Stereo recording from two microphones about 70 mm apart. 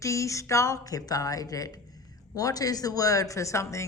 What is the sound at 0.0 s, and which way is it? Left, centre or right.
A woman's voice, left.